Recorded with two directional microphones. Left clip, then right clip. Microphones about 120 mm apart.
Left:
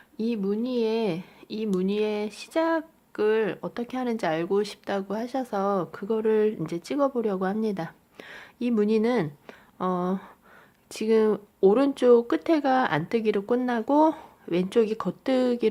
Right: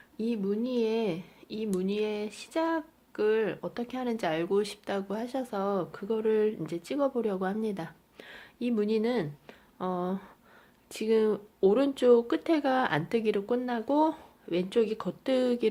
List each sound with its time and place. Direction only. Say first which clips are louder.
0.2 s speech: left 3 dB; 35° left (ahead or behind)